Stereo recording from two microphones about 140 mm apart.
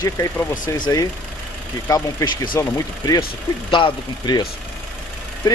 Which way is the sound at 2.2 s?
30° left (ahead or behind).